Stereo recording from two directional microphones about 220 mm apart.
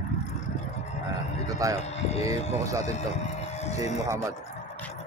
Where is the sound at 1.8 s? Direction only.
30° left (ahead or behind).